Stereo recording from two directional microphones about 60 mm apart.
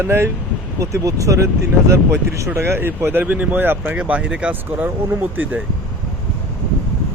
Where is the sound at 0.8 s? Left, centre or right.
Right.